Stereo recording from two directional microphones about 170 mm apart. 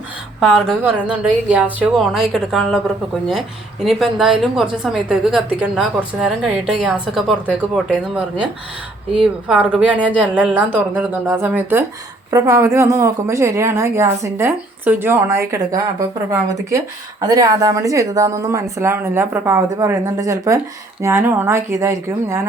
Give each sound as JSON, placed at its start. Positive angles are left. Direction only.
{"t": 0.3, "sound": "a woman's voice", "side_deg": 0}